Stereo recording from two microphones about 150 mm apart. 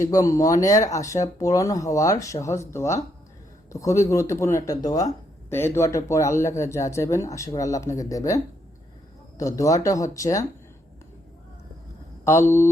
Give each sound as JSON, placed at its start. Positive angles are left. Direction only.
{"t": 0.0, "sound": "speech", "side_deg": 20}
{"t": 9.4, "sound": "speech", "side_deg": 20}
{"t": 12.2, "sound": "speech", "side_deg": 20}